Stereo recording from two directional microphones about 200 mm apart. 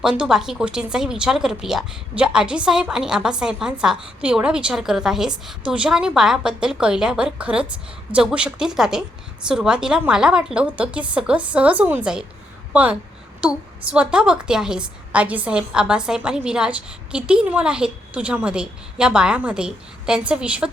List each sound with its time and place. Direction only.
0.0 s a woman's voice: 5° right (ahead or behind)